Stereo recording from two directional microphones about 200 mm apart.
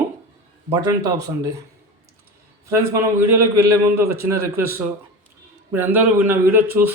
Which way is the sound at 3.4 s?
15° right (ahead or behind).